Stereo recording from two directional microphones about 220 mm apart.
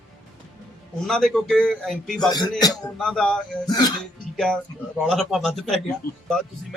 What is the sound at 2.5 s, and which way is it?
Speech, 15° left (ahead or behind).